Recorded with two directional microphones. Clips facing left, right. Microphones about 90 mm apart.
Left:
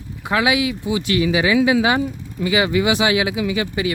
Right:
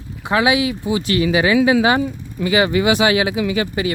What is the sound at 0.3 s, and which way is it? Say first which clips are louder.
Speech: right 2 dB; 30° right (ahead or behind).